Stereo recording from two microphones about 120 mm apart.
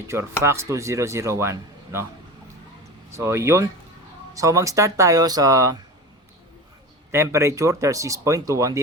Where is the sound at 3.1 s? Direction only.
25° right (ahead or behind).